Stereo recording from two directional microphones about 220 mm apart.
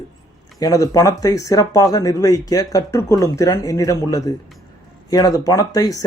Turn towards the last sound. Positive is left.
turn(degrees=15)  # may be behind; listen again after turning